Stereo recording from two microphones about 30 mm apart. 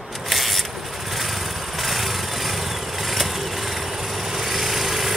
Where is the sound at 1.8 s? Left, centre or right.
Centre.